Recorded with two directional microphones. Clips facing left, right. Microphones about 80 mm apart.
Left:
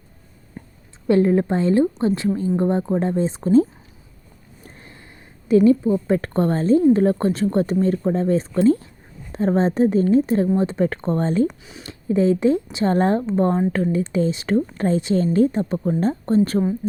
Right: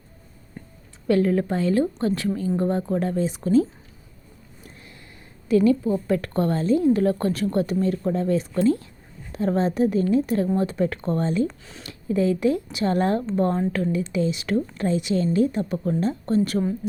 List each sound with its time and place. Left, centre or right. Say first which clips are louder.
1.0 s a woman's voice: left 4 dB; left
4.6 s a sound: left 3 dB; left
5.5 s a woman's voice: left 4 dB; left
11.4 s speech: left 5 dB; centre
11.8 s a woman's voice: left 4 dB; left